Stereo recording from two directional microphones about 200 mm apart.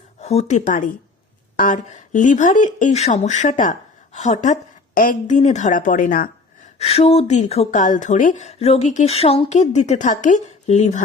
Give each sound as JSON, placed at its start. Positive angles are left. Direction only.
{"t": 0.2, "sound": "speech", "side_deg": 35}
{"t": 6.7, "sound": "speech", "side_deg": 30}